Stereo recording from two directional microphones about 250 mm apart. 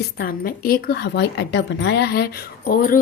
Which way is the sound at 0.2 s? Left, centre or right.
Left.